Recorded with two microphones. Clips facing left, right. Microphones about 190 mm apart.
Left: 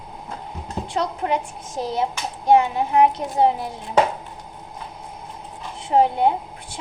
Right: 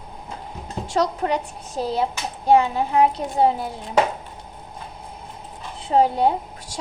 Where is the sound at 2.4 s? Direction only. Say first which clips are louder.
Even; 30° right (ahead or behind).